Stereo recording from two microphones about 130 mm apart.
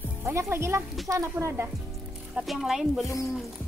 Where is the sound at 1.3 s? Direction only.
15° right (ahead or behind).